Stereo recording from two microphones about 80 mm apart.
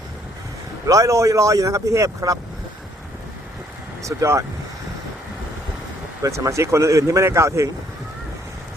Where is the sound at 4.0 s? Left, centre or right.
Right.